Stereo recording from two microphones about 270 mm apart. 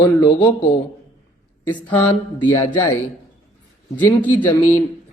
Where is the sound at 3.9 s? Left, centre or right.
Centre.